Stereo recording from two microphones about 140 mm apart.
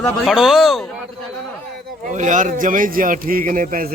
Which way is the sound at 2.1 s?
60° right (ahead or behind).